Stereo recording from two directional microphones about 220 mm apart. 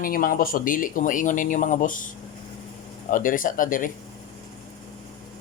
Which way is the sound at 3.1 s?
40° left (ahead or behind).